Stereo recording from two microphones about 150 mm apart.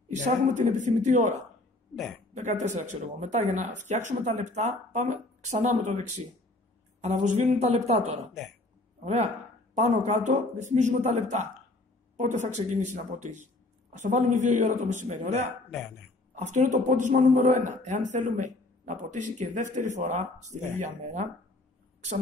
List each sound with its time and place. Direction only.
0.1 s speech: 55° right (ahead or behind)
2.0 s speech: 5° left (ahead or behind)
2.3 s speech: 50° right (ahead or behind)
8.3 s speech: centre (ahead or behind)
9.0 s speech: 45° right (ahead or behind)